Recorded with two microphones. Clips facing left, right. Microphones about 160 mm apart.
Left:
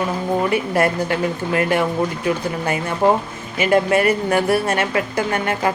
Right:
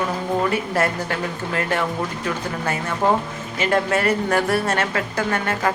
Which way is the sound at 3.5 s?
10° left (ahead or behind).